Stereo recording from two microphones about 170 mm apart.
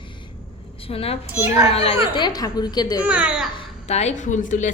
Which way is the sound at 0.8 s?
35° left (ahead or behind).